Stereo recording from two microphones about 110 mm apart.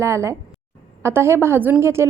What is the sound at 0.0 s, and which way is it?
A woman's voice, 25° right (ahead or behind).